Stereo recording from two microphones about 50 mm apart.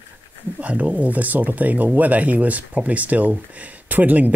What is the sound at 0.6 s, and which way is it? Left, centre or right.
Speech, right.